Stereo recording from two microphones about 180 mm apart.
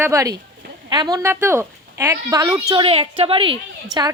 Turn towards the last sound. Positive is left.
turn(degrees=-20)  # may be behind; listen again after turning